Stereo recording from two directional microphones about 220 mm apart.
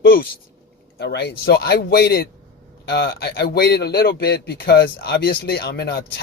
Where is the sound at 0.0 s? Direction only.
45° left (ahead or behind).